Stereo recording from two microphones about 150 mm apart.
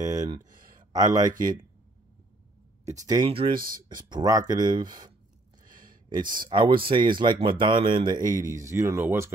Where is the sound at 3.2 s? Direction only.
35° right (ahead or behind).